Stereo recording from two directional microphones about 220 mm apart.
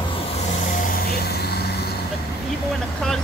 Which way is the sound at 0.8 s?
45° left (ahead or behind).